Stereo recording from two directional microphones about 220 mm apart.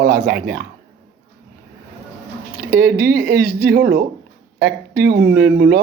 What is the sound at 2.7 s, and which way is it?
Speech, 40° right (ahead or behind).